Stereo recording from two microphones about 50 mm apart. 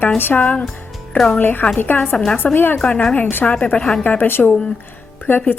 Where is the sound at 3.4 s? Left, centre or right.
Left.